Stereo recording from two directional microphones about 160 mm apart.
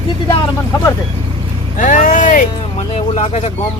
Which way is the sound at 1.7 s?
55° left (ahead or behind).